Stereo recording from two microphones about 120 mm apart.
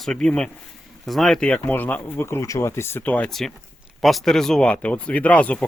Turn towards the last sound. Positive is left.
turn(degrees=10)  # may be behind; listen again after turning